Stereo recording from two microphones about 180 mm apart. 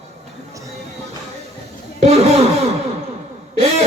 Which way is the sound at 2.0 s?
35° right (ahead or behind).